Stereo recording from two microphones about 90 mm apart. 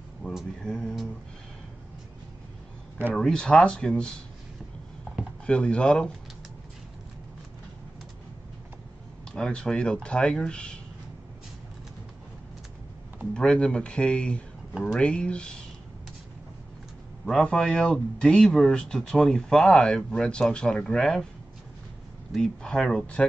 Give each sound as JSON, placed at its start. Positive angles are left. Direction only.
{"t": 0.3, "sound": "speech", "side_deg": 0}
{"t": 3.2, "sound": "speech", "side_deg": 10}
{"t": 5.5, "sound": "speech", "side_deg": 10}
{"t": 9.3, "sound": "speech", "side_deg": 10}
{"t": 13.3, "sound": "speech", "side_deg": 10}
{"t": 17.3, "sound": "speech", "side_deg": 10}
{"t": 22.3, "sound": "speech", "side_deg": 5}